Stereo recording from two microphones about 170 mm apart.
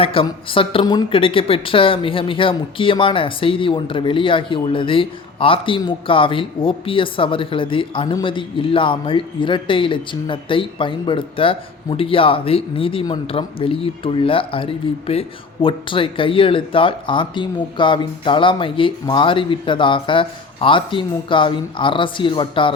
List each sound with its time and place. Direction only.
0.0 s a woman's voice: 30° left (ahead or behind)